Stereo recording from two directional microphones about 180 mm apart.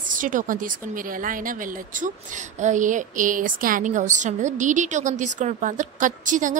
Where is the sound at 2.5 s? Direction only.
45° right (ahead or behind).